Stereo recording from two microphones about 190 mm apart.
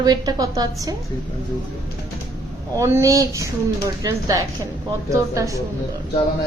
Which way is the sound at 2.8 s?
15° right (ahead or behind).